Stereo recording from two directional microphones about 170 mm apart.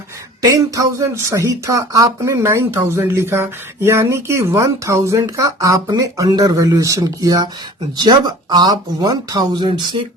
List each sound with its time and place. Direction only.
0.4 s speech: 20° right (ahead or behind)